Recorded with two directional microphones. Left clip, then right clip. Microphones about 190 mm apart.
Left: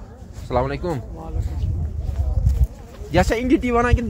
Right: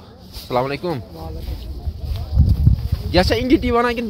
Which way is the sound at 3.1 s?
20° right (ahead or behind).